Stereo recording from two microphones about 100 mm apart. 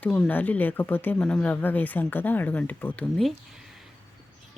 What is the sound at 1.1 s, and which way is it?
A woman's voice, 10° left (ahead or behind).